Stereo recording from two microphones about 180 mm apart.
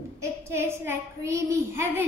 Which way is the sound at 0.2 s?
15° right (ahead or behind).